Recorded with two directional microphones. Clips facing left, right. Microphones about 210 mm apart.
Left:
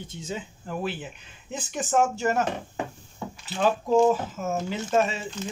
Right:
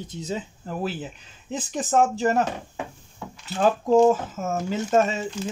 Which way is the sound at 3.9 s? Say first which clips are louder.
Right 3 dB; 45° right (ahead or behind).